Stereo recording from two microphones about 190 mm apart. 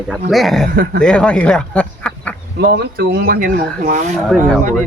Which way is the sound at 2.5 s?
55° right (ahead or behind).